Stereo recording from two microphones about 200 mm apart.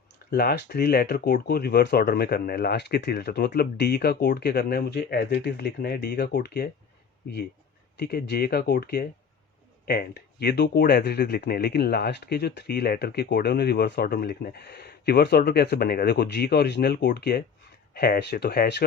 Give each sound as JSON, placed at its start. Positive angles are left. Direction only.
{"t": 0.3, "sound": "speech", "side_deg": 50}
{"t": 7.9, "sound": "speech", "side_deg": 55}